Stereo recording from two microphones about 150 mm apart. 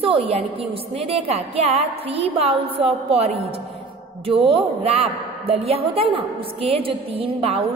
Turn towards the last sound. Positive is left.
turn(degrees=-40)  # may be behind; listen again after turning